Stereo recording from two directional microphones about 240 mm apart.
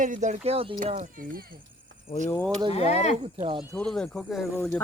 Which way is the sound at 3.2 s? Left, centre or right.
Right.